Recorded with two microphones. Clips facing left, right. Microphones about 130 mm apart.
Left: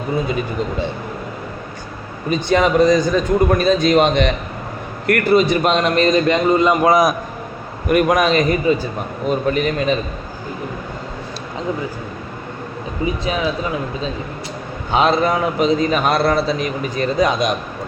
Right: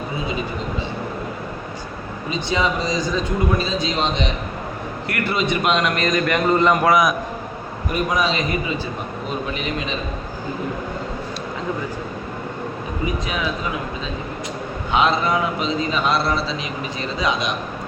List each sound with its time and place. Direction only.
2.3 s speech: 55° left (ahead or behind)
5.0 s a man's voice: 45° left (ahead or behind); by 6.9 s 15° left (ahead or behind)
7.9 s a man's voice: 65° left (ahead or behind); by 9.9 s 45° left (ahead or behind)
14.9 s a man's voice: 40° left (ahead or behind)